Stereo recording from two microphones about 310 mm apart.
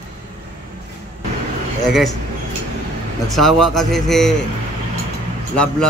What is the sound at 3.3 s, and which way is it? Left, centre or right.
Speech, centre.